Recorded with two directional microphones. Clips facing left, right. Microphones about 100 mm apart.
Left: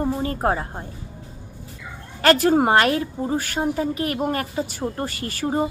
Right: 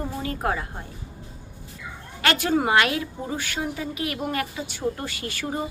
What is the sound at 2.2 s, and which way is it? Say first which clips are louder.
A woman's voice: left 6 dB; 40° left (ahead or behind).